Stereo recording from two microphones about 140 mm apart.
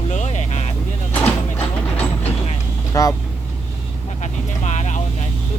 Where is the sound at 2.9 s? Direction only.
25° left (ahead or behind).